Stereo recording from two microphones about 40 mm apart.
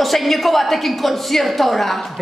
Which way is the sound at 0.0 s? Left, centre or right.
Centre.